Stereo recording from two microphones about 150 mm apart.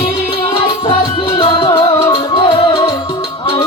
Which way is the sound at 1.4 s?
35° left (ahead or behind).